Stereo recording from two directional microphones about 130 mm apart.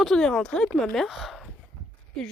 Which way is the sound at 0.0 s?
5° left (ahead or behind).